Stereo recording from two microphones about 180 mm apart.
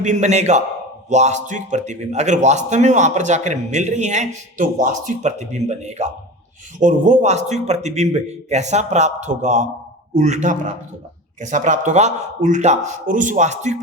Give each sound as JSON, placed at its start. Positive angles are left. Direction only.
{"t": 0.0, "sound": "a man's voice", "side_deg": -40}